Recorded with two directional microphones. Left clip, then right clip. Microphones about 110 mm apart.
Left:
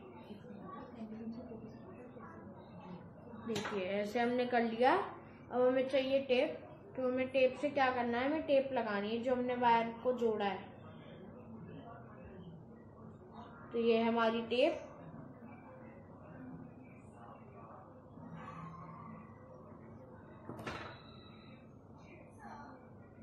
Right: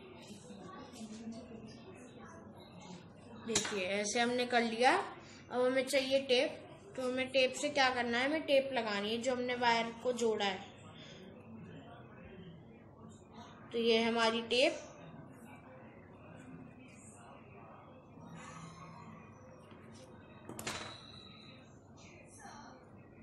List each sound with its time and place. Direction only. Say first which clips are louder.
3.4 s speech: right 3 dB; 5° right (ahead or behind)
5.5 s a woman's voice: even; 15° right (ahead or behind)
13.7 s a woman's voice: right 1 dB; 15° right (ahead or behind)